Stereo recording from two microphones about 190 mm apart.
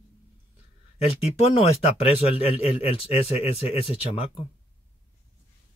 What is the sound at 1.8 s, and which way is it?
A man's voice, 30° left (ahead or behind).